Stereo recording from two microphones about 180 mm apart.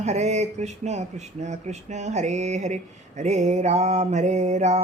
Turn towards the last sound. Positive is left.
turn(degrees=-40)  # may be behind; listen again after turning